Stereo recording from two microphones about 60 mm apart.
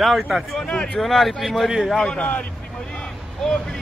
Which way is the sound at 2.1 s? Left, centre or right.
Centre.